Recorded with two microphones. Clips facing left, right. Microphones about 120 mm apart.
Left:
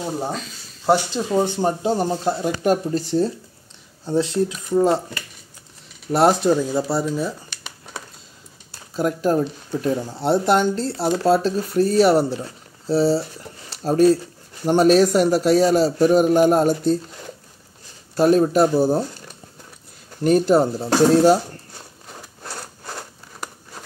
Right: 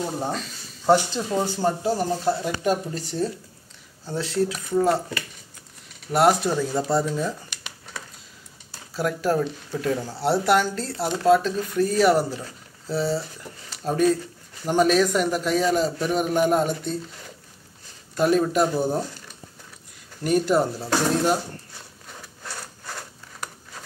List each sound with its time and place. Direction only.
0.2 s speech: centre (ahead or behind)
0.8 s speech: 15° left (ahead or behind)
2.6 s speech: 40° left (ahead or behind)
4.0 s speech: 20° left (ahead or behind)
6.1 s speech: 30° left (ahead or behind)
6.5 s speech: 10° left (ahead or behind)
8.9 s speech: 20° left (ahead or behind); by 17.0 s 40° left (ahead or behind)
18.1 s speech: 35° left (ahead or behind)
20.2 s speech: 35° left (ahead or behind)
22.4 s wood: 35° left (ahead or behind)